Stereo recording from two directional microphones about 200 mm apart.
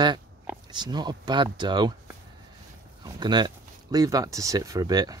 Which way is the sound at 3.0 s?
20° right (ahead or behind).